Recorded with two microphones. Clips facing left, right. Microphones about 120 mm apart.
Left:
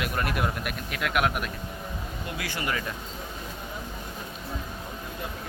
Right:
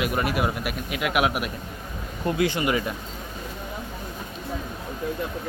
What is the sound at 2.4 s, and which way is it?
Speech, 20° right (ahead or behind).